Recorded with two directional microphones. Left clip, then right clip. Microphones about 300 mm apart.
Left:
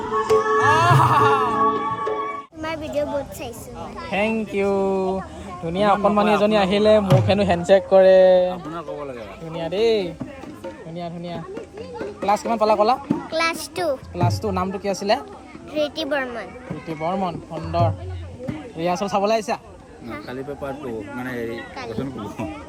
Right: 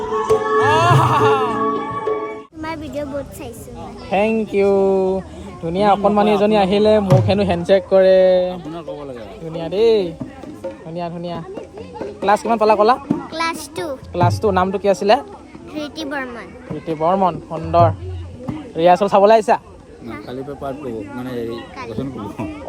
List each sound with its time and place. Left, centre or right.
0.0 s music: centre
4.1 s speech: centre
4.6 s speech: centre
9.5 s a sound: centre
11.0 s speech: centre
11.3 s children playing: centre
12.5 s speech: centre
13.1 s a child's voice: centre
14.1 s speech: centre
19.0 s speech: centre